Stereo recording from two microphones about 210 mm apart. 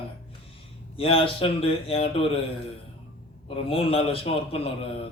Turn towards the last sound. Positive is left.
turn(degrees=25)  # may be behind; listen again after turning